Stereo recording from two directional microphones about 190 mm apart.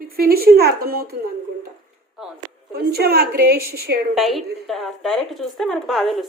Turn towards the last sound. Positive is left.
turn(degrees=0)  # may be behind; listen again after turning